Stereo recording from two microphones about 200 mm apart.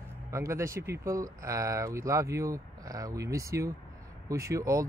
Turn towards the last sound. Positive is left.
turn(degrees=-15)  # may be behind; listen again after turning